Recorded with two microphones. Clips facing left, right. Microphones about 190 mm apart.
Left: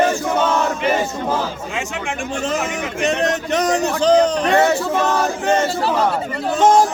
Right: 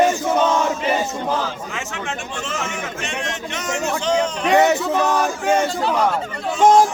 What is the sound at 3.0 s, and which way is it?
A man's voice, 40° left (ahead or behind).